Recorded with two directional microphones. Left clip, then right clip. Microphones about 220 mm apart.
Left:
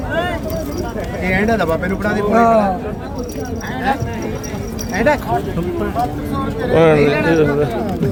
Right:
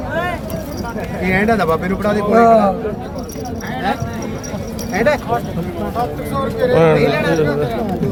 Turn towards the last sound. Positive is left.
turn(degrees=15)  # may be behind; listen again after turning